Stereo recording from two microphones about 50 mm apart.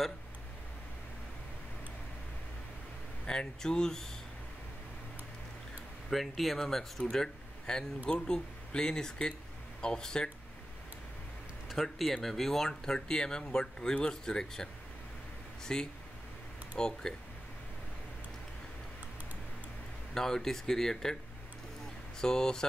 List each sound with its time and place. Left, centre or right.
3.3 s speech: centre
6.0 s speech: centre
11.7 s speech: centre
20.2 s speech: centre
22.2 s speech: centre